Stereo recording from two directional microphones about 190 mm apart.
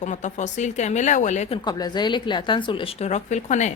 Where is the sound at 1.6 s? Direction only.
20° left (ahead or behind); by 3.7 s 40° left (ahead or behind).